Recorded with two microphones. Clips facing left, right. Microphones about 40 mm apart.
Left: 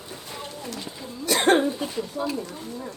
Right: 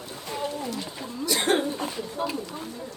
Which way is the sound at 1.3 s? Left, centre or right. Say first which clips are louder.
Left 5 dB; left.